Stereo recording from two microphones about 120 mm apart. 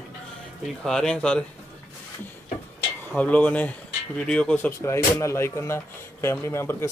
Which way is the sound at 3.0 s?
10° left (ahead or behind).